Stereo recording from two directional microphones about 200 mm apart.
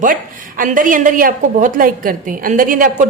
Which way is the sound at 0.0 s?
40° right (ahead or behind).